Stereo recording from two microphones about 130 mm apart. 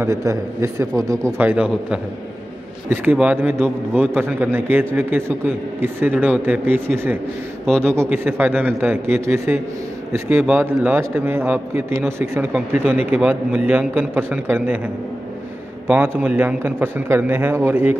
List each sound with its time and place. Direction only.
0.0 s a man's voice: 25° right (ahead or behind)
1.4 s a man's voice: 10° right (ahead or behind)
15.9 s a man's voice: 15° right (ahead or behind)